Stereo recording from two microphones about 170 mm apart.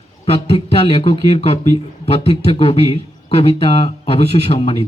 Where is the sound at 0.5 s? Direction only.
35° left (ahead or behind).